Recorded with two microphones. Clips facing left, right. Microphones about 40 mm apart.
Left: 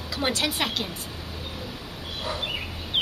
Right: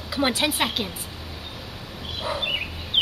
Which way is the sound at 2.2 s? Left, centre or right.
Centre.